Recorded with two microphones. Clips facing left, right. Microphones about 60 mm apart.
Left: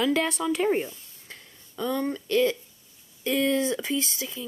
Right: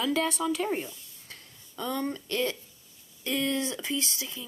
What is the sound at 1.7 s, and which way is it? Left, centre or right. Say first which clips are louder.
Speech: left 4 dB; centre.